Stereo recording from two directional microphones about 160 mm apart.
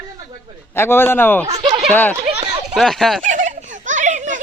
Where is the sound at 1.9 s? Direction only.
10° left (ahead or behind).